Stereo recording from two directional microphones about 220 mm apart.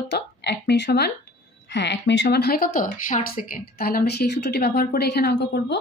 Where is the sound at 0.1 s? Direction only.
50° left (ahead or behind).